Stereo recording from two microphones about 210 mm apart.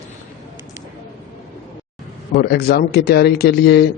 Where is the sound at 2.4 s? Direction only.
50° left (ahead or behind).